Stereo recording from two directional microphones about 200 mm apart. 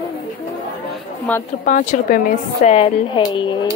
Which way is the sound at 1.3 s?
5° left (ahead or behind).